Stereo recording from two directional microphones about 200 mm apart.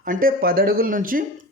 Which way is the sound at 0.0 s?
45° right (ahead or behind).